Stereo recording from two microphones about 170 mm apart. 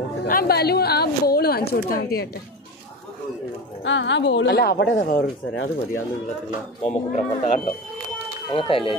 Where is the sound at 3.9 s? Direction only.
90° left; by 5.7 s 55° left (ahead or behind).